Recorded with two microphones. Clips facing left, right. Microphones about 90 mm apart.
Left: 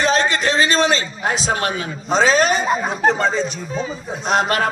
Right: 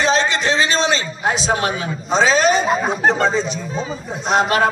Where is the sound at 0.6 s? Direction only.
20° right (ahead or behind).